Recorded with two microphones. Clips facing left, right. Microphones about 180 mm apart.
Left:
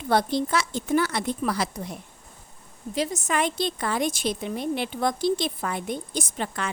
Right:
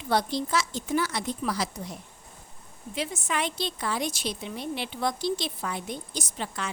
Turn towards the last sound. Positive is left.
turn(degrees=55)  # may be behind; listen again after turning